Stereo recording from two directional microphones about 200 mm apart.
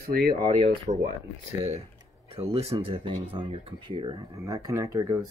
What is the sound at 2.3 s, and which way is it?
Speech, 30° right (ahead or behind).